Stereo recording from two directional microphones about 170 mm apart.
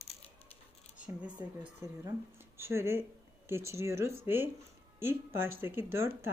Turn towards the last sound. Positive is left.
turn(degrees=-15)  # may be behind; listen again after turning